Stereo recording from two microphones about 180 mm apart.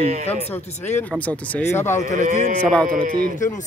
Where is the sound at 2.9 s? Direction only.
50° right (ahead or behind).